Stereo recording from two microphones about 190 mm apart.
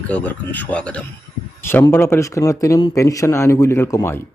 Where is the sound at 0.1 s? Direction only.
10° left (ahead or behind).